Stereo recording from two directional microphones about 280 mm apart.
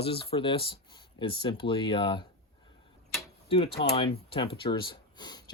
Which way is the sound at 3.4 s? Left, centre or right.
Centre.